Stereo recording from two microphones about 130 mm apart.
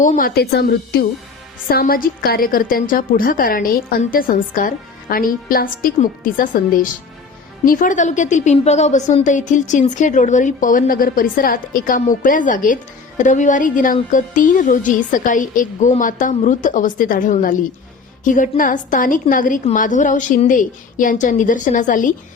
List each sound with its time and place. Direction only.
0.0 s a woman's voice: 85° left
1.8 s a woman's voice: 90° left
16.3 s a woman's voice: 75° left (ahead or behind)